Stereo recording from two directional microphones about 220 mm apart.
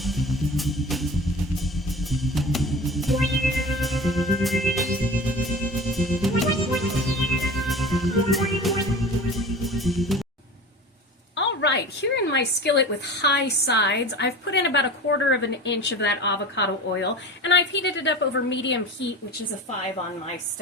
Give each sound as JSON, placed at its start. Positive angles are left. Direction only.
{"t": 0.0, "sound": "music", "side_deg": 0}
{"t": 11.3, "sound": "speech", "side_deg": 55}